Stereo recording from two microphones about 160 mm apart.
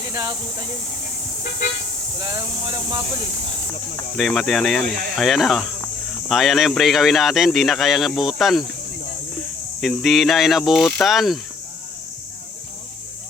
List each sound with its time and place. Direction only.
0.1 s speech: 25° right (ahead or behind)
2.1 s speech: 25° right (ahead or behind)
4.2 s speech: centre (ahead or behind)
9.8 s speech: centre (ahead or behind)